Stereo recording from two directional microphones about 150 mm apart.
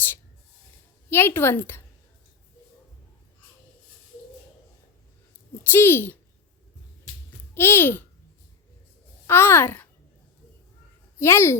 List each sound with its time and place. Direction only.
1.1 s a woman's voice: 15° left (ahead or behind)
5.7 s a woman's voice: 15° left (ahead or behind)
7.5 s a woman's voice: 15° left (ahead or behind)
9.2 s a woman's voice: 15° left (ahead or behind)
11.2 s a woman's voice: 15° left (ahead or behind)